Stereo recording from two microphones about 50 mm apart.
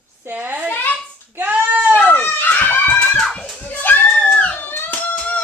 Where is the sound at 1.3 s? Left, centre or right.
Right.